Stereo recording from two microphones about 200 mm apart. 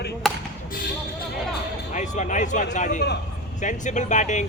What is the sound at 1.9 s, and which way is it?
Speech, 40° left (ahead or behind).